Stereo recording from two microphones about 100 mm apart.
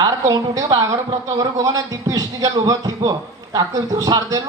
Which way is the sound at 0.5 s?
40° right (ahead or behind).